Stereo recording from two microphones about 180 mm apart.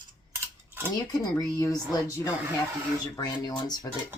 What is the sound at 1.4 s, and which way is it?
Speech, 20° left (ahead or behind).